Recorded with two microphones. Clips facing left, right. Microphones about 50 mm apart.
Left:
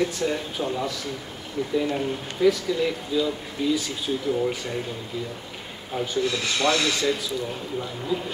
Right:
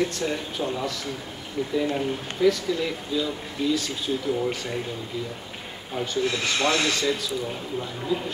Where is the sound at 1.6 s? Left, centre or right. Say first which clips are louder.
Even; centre.